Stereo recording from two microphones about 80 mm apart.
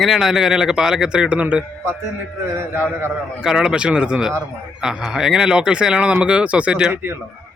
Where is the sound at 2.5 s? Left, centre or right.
Right.